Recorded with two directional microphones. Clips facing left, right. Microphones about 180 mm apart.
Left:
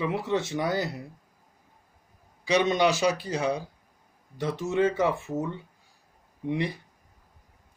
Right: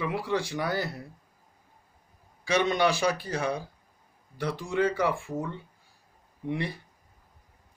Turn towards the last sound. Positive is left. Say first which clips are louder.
# left 3 dB
turn(degrees=20)  # may be behind; listen again after turning